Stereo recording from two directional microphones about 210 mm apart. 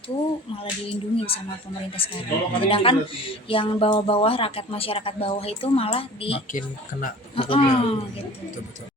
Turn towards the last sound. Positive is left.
turn(degrees=25)  # may be behind; listen again after turning